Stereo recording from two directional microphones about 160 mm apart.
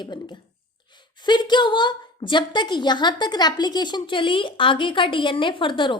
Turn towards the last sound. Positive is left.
turn(degrees=30)  # may be behind; listen again after turning